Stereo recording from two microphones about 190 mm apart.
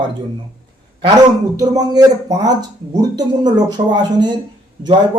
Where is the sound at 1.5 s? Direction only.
20° right (ahead or behind).